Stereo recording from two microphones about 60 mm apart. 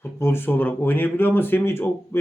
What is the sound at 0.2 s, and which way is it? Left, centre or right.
Speech, left.